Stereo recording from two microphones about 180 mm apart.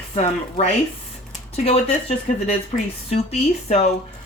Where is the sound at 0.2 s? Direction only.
40° left (ahead or behind).